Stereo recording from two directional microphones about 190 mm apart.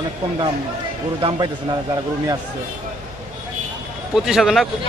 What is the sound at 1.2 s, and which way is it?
Speech, 30° right (ahead or behind).